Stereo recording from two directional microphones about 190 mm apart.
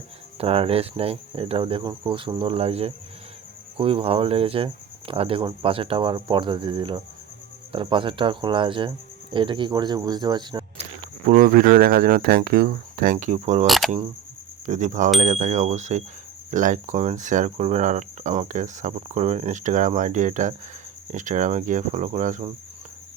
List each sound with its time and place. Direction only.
0.3 s cricket: 30° right (ahead or behind)
11.3 s speech: 45° right (ahead or behind)
13.7 s speech: centre (ahead or behind)
14.7 s speech: 40° right (ahead or behind)